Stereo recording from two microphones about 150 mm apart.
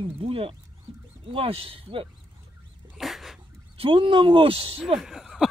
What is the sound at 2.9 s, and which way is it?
Dog, centre (ahead or behind).